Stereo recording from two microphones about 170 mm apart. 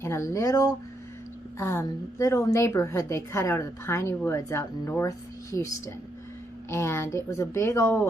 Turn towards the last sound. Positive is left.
turn(degrees=15)  # may be behind; listen again after turning